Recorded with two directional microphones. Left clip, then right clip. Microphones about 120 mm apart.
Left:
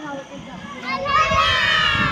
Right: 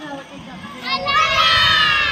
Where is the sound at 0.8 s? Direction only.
15° left (ahead or behind).